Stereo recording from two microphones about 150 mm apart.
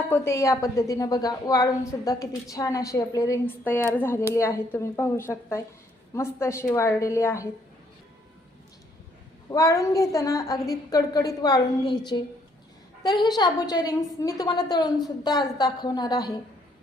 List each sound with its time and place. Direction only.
0.1 s a woman's voice: 20° left (ahead or behind)
9.5 s a woman's voice: 25° left (ahead or behind)